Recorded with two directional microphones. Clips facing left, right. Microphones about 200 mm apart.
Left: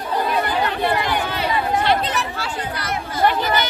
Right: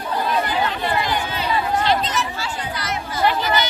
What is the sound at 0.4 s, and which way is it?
Chatter, 60° left (ahead or behind).